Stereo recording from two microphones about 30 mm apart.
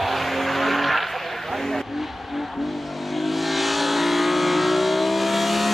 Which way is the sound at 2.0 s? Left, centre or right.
Centre.